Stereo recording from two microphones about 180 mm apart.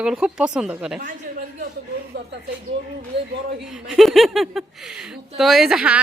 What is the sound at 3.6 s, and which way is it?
A woman's voice, 5° right (ahead or behind).